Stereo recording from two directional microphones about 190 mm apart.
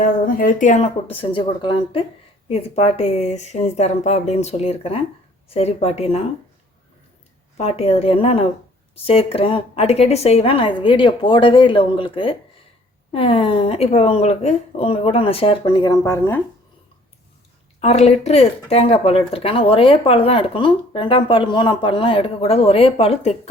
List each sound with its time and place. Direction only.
0.0 s speech: 45° left (ahead or behind)
7.5 s speech: 30° left (ahead or behind); by 16.4 s 15° left (ahead or behind)
17.7 s speech: 35° left (ahead or behind)